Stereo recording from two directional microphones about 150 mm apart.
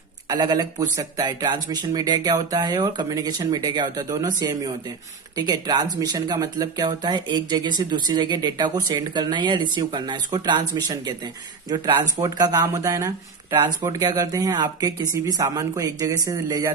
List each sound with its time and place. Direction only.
0.3 s speech: 30° right (ahead or behind)